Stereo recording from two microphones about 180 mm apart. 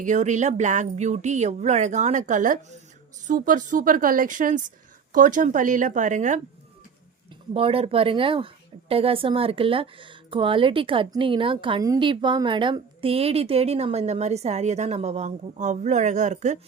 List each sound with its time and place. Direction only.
0.0 s speech: 45° right (ahead or behind)
7.5 s speech: 30° right (ahead or behind)